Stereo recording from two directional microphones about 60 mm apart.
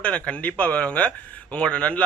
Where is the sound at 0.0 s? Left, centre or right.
Left.